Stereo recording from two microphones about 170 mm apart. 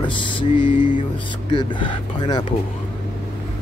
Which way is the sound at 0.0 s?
30° left (ahead or behind).